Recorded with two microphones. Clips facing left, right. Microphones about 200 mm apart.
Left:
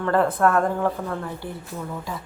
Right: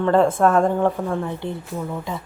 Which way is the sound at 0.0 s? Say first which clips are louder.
Right 4 dB; 20° right (ahead or behind).